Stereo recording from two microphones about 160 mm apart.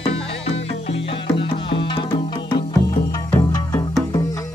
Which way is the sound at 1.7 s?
30° left (ahead or behind).